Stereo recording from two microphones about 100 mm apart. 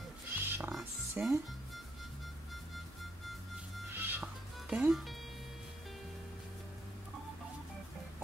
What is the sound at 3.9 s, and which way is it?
Music, 20° right (ahead or behind).